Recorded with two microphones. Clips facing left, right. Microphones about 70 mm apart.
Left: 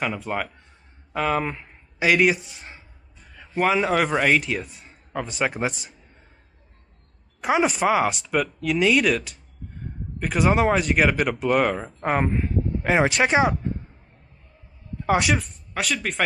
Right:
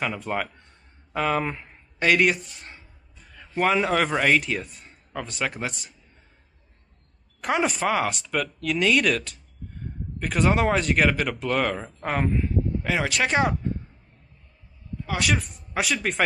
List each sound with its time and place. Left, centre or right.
0.0 s a man's voice: centre
5.7 s speech: centre
7.4 s speech: centre
12.3 s speech: left
13.3 s speech: centre
15.2 s speech: centre